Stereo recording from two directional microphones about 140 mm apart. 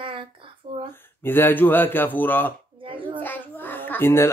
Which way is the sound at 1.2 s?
15° left (ahead or behind).